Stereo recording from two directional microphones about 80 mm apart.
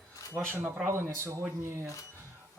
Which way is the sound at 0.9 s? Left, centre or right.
Right.